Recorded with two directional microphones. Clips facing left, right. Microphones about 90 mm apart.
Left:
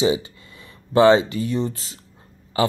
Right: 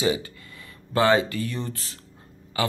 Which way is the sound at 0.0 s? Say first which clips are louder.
Left 4 dB; 20° left (ahead or behind).